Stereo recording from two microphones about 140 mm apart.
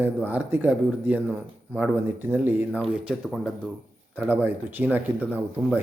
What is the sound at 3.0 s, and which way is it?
Speech, 5° right (ahead or behind).